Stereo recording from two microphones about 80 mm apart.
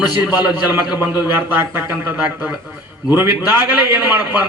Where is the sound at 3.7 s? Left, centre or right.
Centre.